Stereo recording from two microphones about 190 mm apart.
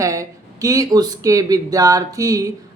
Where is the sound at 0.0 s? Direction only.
15° right (ahead or behind).